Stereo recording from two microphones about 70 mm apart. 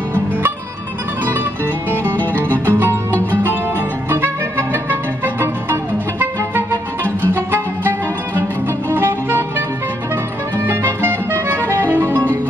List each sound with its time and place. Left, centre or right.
2.6 s music: right
8.9 s music: right
10.7 s music: right